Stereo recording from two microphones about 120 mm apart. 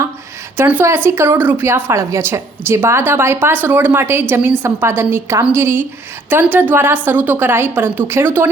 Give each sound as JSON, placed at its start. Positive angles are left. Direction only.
{"t": 0.5, "sound": "a woman's voice", "side_deg": -15}